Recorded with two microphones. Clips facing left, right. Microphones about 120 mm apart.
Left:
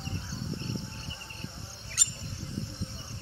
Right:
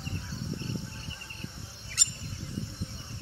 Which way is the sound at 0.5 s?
25° left (ahead or behind).